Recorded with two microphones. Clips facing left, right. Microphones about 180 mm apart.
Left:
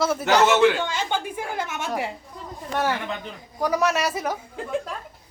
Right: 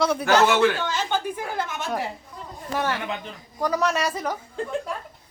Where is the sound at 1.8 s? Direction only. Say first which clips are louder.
Left 2 dB; 10° left (ahead or behind).